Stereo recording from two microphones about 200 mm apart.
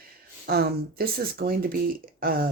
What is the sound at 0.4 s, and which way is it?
Speech, 50° right (ahead or behind).